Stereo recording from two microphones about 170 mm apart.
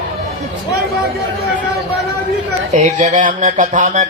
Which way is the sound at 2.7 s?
45° right (ahead or behind).